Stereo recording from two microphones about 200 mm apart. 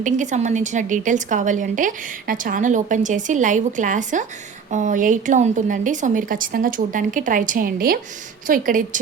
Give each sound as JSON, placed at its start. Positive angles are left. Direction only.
{"t": 0.0, "sound": "a woman's voice", "side_deg": -40}